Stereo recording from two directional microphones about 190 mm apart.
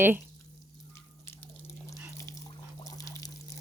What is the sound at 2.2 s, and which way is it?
Water, 15° left (ahead or behind).